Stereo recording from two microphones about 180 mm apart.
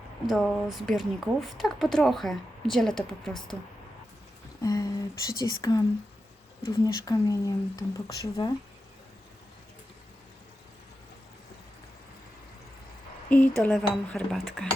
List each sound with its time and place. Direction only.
0.3 s a woman's voice: centre (ahead or behind)
4.6 s speech: 20° left (ahead or behind)
13.3 s a woman's voice: 5° left (ahead or behind)